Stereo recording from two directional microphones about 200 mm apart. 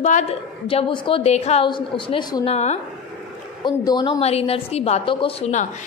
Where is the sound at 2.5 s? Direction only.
35° left (ahead or behind).